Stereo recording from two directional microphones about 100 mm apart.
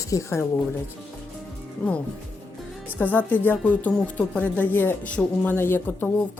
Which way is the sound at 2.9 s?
15° left (ahead or behind).